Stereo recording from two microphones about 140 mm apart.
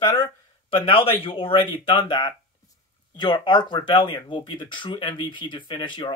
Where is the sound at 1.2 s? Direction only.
40° left (ahead or behind).